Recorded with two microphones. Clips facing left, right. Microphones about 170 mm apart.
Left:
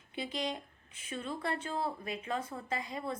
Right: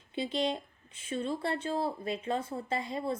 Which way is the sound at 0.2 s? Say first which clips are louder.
Right 5 dB; 25° right (ahead or behind).